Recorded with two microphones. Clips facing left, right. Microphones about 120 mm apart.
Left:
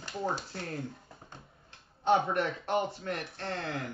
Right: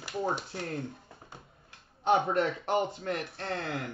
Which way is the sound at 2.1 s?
25° right (ahead or behind).